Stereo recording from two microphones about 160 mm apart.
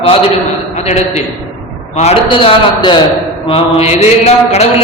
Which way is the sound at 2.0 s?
35° left (ahead or behind).